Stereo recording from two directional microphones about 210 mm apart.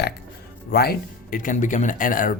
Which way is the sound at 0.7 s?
45° left (ahead or behind).